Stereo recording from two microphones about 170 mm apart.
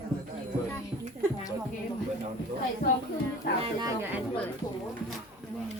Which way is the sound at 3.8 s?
15° right (ahead or behind).